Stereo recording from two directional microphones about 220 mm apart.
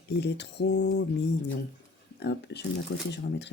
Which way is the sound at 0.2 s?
50° left (ahead or behind).